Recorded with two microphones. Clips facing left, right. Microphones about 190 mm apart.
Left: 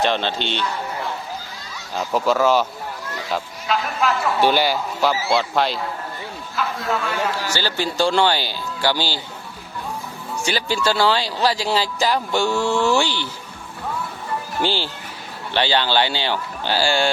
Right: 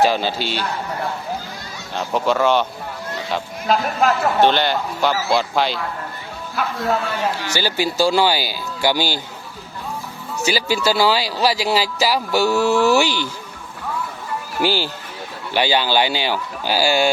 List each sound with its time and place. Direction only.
0.0 s speech: 5° right (ahead or behind)
2.0 s speech: centre (ahead or behind)
3.7 s a woman's voice: 45° right (ahead or behind)
4.4 s speech: 10° left (ahead or behind)
6.6 s a sound: 60° right (ahead or behind)
7.5 s speech: 10° right (ahead or behind)
10.4 s speech: 10° right (ahead or behind)
14.6 s speech: 10° right (ahead or behind)